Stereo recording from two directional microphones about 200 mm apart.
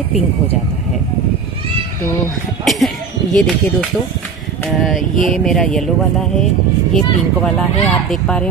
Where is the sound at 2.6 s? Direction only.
Centre (ahead or behind).